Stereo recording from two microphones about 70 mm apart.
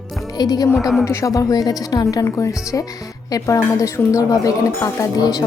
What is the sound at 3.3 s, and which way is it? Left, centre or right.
Speech, left.